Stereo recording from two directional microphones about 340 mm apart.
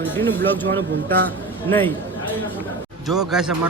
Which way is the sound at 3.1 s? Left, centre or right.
Centre.